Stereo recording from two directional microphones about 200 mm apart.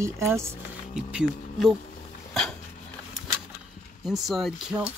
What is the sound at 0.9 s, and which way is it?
Speech, centre (ahead or behind).